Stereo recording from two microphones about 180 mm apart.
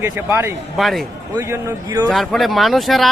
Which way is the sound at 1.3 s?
15° right (ahead or behind).